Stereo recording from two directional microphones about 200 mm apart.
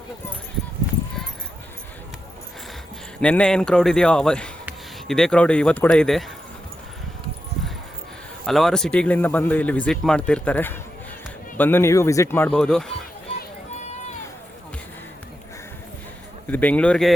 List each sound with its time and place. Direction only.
3.2 s speech: 5° left (ahead or behind)
8.4 s speech: centre (ahead or behind)
16.5 s speech: 10° left (ahead or behind)